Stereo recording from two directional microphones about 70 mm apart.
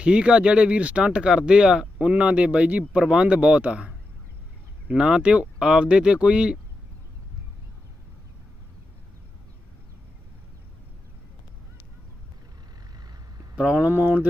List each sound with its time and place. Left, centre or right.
0.0 s speech: centre
13.6 s speech: centre
13.8 s speech: right